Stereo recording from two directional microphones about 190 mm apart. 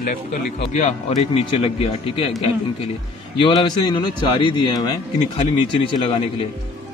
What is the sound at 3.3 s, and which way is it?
Speech, 25° left (ahead or behind).